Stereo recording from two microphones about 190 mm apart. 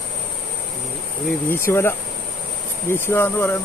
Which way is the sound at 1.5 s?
15° left (ahead or behind).